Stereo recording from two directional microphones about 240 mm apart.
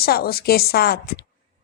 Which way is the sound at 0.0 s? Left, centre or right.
Left.